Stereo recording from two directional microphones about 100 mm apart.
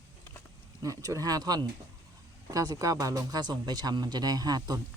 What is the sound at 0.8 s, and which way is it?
Speech, 35° right (ahead or behind).